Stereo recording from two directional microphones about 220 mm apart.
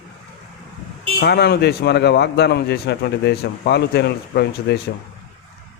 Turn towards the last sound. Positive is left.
turn(degrees=45)  # may be behind; listen again after turning